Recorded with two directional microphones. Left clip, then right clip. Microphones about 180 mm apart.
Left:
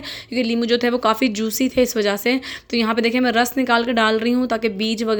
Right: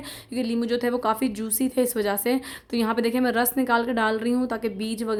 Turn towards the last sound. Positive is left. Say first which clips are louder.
# left 7 dB
turn(degrees=15)  # may be behind; listen again after turning